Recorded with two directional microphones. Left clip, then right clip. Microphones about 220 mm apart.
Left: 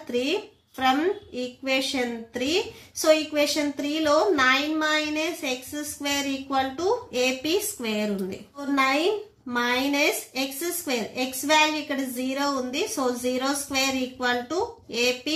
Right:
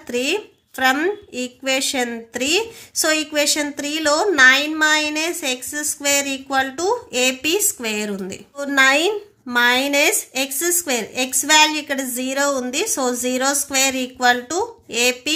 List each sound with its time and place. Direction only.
0.1 s a woman's voice: 50° right (ahead or behind)